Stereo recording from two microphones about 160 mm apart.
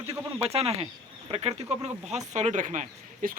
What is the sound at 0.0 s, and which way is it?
Speech, 20° right (ahead or behind).